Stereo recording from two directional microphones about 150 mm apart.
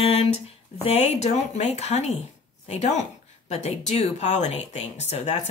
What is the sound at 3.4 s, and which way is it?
Speech, 45° left (ahead or behind).